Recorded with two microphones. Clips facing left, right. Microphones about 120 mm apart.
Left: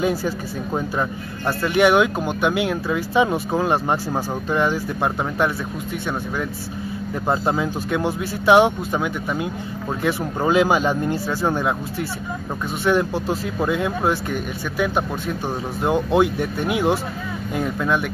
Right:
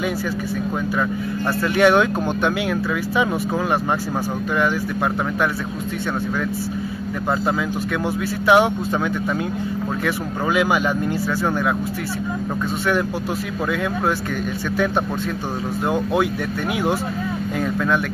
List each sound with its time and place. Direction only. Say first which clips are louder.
0.0 s speech: left 2 dB; 35° left (ahead or behind)
1.4 s speech: even; 15° left (ahead or behind)
2.5 s speech: even; 25° left (ahead or behind)
7.2 s speech: left 1 dB; 25° left (ahead or behind)
10.0 s speech: left 5 dB; 25° left (ahead or behind)
12.8 s speech: left 4 dB; 25° left (ahead or behind)